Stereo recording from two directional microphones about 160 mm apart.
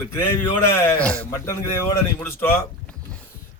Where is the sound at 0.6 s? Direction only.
15° left (ahead or behind).